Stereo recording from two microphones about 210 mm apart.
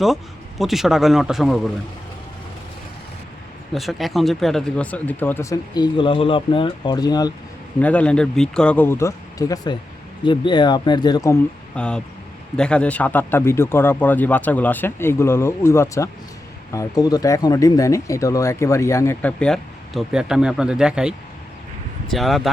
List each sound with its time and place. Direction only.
0.6 s a man's voice: centre (ahead or behind)
3.8 s speech: centre (ahead or behind); by 7.3 s 20° left (ahead or behind)
7.8 s a man's voice: 5° left (ahead or behind)